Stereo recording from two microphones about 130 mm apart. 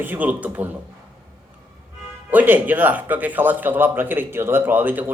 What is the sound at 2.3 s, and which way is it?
Speech, 15° right (ahead or behind).